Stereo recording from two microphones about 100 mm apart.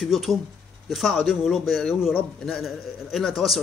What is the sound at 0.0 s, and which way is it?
A man's voice, centre (ahead or behind).